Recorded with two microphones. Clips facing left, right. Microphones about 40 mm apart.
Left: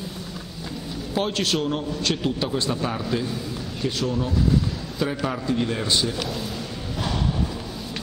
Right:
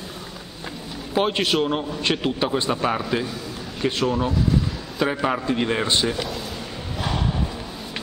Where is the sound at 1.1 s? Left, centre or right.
Right.